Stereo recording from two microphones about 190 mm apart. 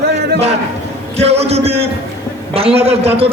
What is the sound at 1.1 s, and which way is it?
A man's voice, 35° right (ahead or behind).